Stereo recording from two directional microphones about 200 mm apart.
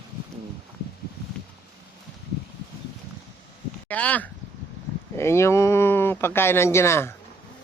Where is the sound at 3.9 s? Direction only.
5° left (ahead or behind).